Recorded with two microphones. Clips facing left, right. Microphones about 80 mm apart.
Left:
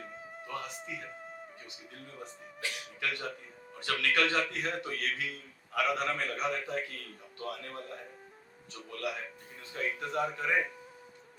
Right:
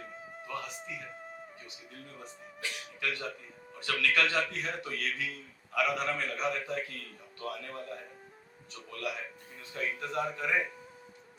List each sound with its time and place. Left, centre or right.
0.0 s music: centre
0.4 s music: left
1.2 s music: centre
3.0 s a man's voice: left
8.9 s a man's voice: left